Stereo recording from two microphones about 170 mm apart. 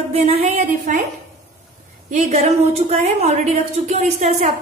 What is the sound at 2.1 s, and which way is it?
A woman's voice, 40° right (ahead or behind).